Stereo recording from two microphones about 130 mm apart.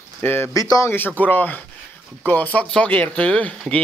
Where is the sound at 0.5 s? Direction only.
30° left (ahead or behind).